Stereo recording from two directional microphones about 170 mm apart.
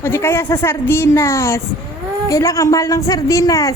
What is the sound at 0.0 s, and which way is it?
A woman's voice, 15° left (ahead or behind).